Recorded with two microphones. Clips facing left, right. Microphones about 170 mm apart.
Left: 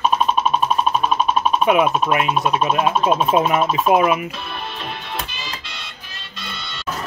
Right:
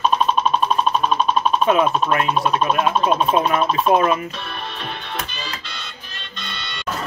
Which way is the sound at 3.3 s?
20° left (ahead or behind).